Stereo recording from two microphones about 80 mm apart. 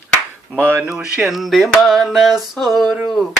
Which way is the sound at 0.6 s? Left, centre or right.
Centre.